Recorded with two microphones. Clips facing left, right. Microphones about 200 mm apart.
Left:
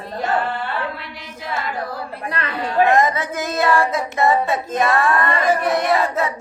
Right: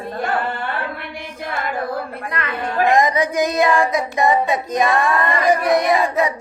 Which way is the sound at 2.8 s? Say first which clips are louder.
Right 1 dB; 15° right (ahead or behind).